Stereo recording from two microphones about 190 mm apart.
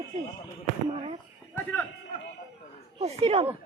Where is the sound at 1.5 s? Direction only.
10° left (ahead or behind).